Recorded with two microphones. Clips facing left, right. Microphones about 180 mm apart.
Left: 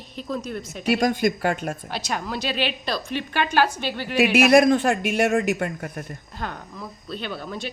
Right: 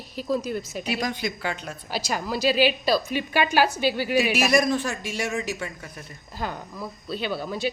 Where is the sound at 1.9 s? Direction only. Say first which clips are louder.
Right 1 dB; 5° right (ahead or behind).